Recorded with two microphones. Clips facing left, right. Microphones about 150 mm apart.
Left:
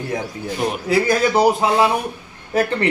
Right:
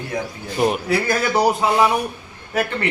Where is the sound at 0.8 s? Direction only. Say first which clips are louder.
Left 3 dB; 20° left (ahead or behind).